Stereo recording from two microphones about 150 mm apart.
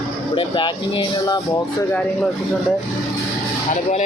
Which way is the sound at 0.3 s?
35° left (ahead or behind).